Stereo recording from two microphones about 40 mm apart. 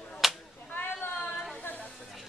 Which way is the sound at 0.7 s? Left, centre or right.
Left.